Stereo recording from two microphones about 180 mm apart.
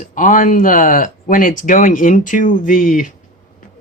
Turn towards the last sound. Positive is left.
turn(degrees=50)  # may be behind; listen again after turning